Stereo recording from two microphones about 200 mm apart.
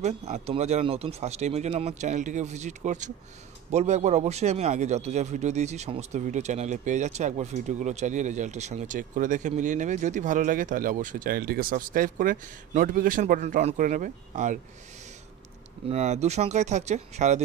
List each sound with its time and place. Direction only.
0.0 s a man's voice: 35° right (ahead or behind)
15.9 s a man's voice: 35° right (ahead or behind)